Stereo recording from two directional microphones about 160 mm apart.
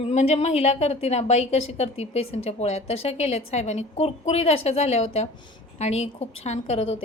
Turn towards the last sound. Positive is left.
turn(degrees=40)  # may be behind; listen again after turning